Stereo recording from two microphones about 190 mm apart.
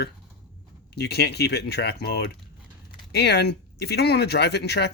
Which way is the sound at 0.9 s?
60° left (ahead or behind).